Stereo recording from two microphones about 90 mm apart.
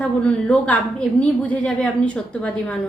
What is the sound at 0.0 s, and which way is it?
A woman's voice, 10° left (ahead or behind).